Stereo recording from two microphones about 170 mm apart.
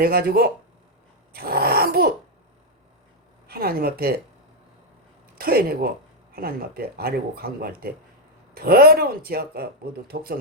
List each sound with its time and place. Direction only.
0.0 s speech: 60° right (ahead or behind)
1.3 s a sound: 65° right (ahead or behind)
3.4 s speech: 60° right (ahead or behind)
5.4 s speech: 60° right (ahead or behind)